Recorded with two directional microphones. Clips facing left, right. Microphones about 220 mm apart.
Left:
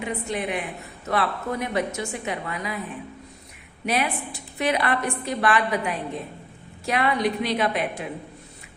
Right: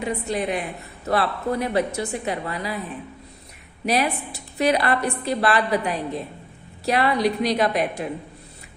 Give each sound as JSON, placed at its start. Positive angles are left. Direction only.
{"t": 0.0, "sound": "a woman's voice", "side_deg": -35}
{"t": 3.8, "sound": "a woman's voice", "side_deg": -35}